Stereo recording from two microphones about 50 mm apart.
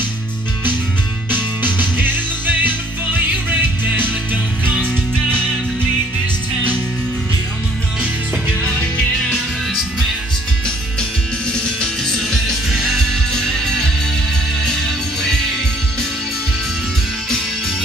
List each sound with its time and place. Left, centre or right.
1.3 s music: right
11.5 s music: centre
13.3 s music: centre